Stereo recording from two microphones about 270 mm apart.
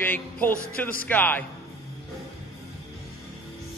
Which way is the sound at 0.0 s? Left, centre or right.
Centre.